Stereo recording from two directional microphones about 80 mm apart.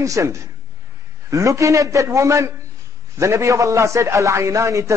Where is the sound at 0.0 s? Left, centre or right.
Right.